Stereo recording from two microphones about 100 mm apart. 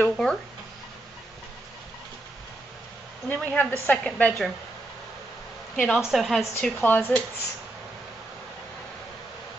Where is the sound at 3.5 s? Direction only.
15° left (ahead or behind).